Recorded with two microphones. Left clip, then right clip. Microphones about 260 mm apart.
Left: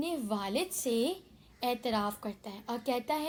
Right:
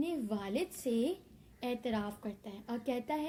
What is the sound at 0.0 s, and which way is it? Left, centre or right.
A woman's voice, left.